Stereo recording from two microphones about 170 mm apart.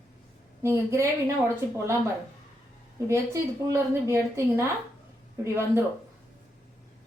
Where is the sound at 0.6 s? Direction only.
15° right (ahead or behind).